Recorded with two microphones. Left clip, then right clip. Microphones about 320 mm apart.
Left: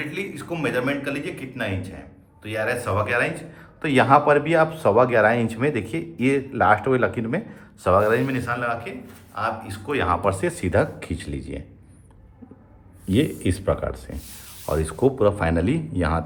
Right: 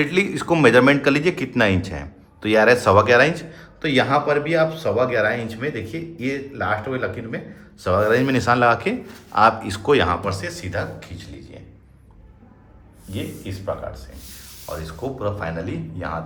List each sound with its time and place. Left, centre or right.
0.0 s a man's voice: centre
10.2 s speech: centre
14.7 s speech: left